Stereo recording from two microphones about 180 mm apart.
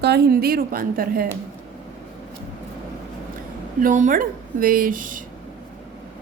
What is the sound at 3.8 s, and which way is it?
A woman's voice, 45° right (ahead or behind).